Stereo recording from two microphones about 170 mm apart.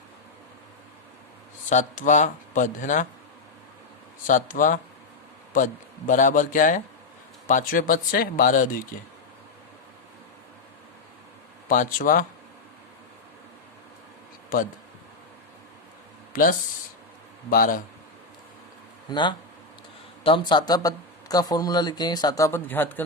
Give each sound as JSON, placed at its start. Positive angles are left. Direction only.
{"t": 1.7, "sound": "speech", "side_deg": 45}
{"t": 4.3, "sound": "speech", "side_deg": 50}
{"t": 6.1, "sound": "speech", "side_deg": 50}
{"t": 11.7, "sound": "speech", "side_deg": 55}
{"t": 16.3, "sound": "speech", "side_deg": 55}
{"t": 19.1, "sound": "speech", "side_deg": 25}